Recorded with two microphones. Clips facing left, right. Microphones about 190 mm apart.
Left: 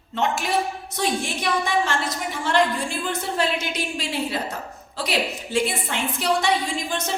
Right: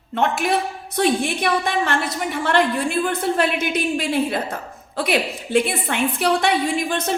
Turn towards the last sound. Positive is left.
turn(degrees=-60)  # may be behind; listen again after turning